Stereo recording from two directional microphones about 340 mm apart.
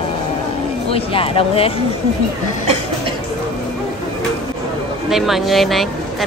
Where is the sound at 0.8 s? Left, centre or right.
Centre.